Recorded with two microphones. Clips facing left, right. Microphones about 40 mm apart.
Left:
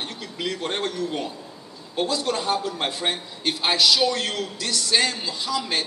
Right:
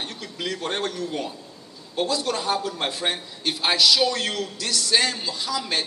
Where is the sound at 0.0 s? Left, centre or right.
Centre.